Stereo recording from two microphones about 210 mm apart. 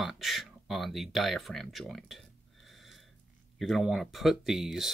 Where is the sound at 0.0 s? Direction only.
Centre (ahead or behind).